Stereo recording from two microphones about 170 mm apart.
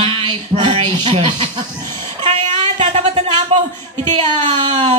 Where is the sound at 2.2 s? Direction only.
40° right (ahead or behind).